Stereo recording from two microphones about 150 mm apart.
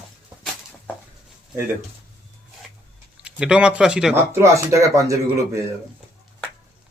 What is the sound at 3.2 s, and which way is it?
Speech, 5° right (ahead or behind).